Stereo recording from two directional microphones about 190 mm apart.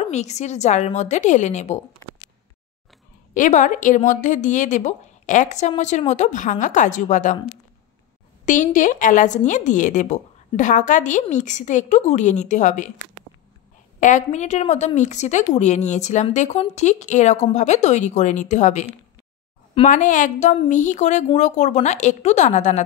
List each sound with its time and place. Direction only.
0.1 s a woman's voice: 35° left (ahead or behind)
3.3 s a woman's voice: 45° left (ahead or behind)
8.5 s a woman's voice: 40° left (ahead or behind)
13.9 s a woman's voice: 40° left (ahead or behind)